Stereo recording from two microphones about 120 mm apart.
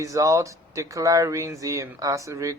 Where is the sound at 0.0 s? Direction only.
25° right (ahead or behind).